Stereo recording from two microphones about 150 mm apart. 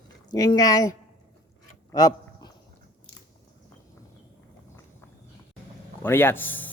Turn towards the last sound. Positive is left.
turn(degrees=10)  # may be behind; listen again after turning